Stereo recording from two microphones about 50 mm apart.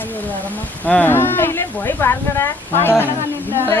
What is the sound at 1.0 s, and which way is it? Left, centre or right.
Speech, left.